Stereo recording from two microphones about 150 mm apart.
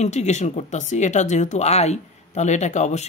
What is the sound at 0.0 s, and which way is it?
Speech, 50° left (ahead or behind).